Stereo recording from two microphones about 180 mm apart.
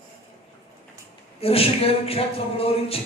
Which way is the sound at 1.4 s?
30° left (ahead or behind).